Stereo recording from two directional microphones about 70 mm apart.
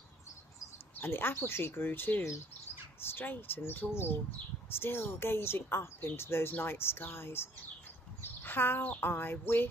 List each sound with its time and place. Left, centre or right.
0.9 s speech: left
8.2 s a sound: left
9.0 s speech: left